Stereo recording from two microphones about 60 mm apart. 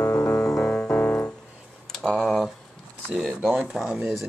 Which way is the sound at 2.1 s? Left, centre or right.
Left.